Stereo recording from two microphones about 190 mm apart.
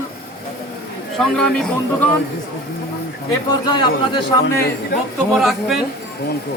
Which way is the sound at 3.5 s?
25° left (ahead or behind).